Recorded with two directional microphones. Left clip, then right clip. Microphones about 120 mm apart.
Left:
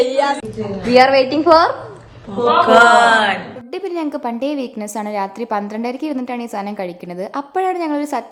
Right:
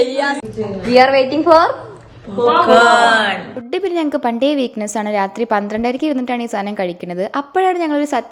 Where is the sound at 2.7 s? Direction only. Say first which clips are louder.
Left 1 dB; 20° left (ahead or behind).